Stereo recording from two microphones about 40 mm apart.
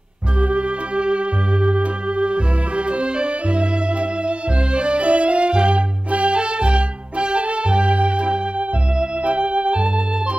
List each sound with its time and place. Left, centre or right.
0.4 s music: right
3.0 s organ: right
4.7 s music: right
9.2 s organ: right